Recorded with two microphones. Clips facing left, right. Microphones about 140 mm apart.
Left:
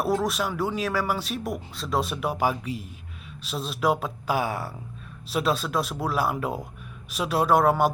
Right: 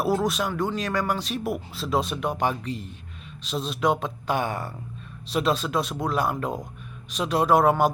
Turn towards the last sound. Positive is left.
turn(degrees=0)  # may be behind; listen again after turning